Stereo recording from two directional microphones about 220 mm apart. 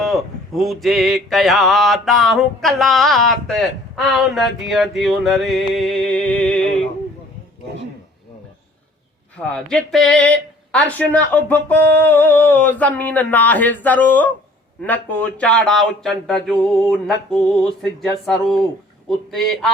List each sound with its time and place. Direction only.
0.0 s mantra: centre (ahead or behind)
9.4 s speech: 5° left (ahead or behind)
14.8 s mantra: 5° left (ahead or behind)